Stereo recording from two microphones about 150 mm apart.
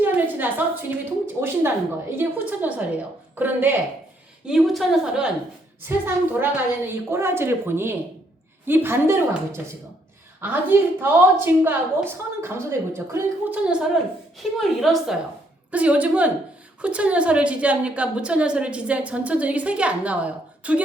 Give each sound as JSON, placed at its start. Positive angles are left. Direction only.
{"t": 0.0, "sound": "a sound", "side_deg": -10}
{"t": 1.4, "sound": "a woman's voice", "side_deg": -15}
{"t": 4.4, "sound": "a woman's voice", "side_deg": 0}
{"t": 5.8, "sound": "a woman's voice", "side_deg": -15}